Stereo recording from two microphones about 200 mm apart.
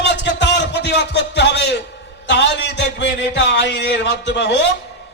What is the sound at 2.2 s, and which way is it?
A man's voice, 60° left (ahead or behind).